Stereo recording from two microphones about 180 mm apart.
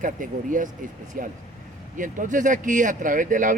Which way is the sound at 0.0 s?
45° right (ahead or behind).